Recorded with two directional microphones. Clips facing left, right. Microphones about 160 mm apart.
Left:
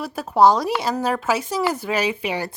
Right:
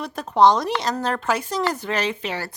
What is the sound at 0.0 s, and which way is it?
Speech, 5° left (ahead or behind).